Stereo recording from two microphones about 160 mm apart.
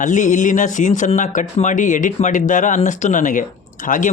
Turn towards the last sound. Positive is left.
turn(degrees=55)  # may be behind; listen again after turning